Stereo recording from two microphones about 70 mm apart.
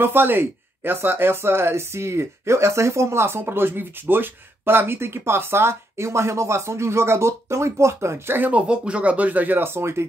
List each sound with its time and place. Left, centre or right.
0.0 s speech: right
8.4 s speech: centre; by 10.0 s right